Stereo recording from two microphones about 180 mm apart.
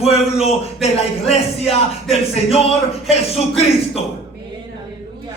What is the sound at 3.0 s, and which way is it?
Speech, 35° left (ahead or behind).